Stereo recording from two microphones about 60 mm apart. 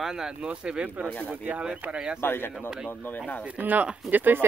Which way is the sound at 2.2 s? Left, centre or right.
Left.